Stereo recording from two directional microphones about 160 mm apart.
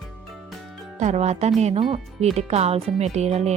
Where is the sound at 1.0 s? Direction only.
45° right (ahead or behind).